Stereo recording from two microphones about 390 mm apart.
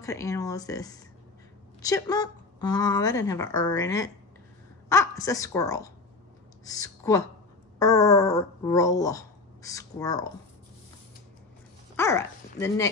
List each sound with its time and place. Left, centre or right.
0.0 s a woman's voice: centre
12.0 s speech: centre